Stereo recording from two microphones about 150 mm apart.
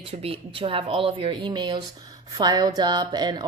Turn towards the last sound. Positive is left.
turn(degrees=-30)  # may be behind; listen again after turning